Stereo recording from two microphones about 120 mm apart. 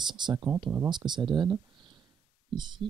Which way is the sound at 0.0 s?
40° right (ahead or behind).